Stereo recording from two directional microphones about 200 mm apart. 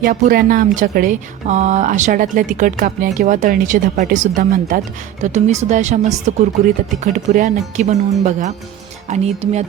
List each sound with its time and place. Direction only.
0.0 s speech: 45° right (ahead or behind)